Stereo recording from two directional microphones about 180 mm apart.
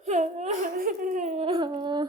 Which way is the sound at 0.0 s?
40° right (ahead or behind).